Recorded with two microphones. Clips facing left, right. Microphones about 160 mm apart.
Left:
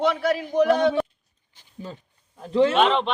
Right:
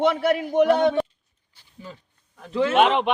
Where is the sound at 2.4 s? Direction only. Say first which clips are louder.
Left 4 dB; 25° left (ahead or behind).